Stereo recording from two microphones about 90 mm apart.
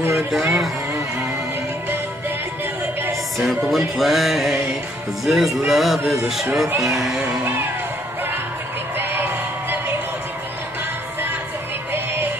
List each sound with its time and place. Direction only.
0.1 s a sound: 5° right (ahead or behind)
3.3 s music: centre (ahead or behind)
8.9 s whoop: 25° right (ahead or behind)